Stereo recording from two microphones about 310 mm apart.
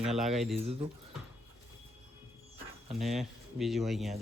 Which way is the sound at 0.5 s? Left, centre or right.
Centre.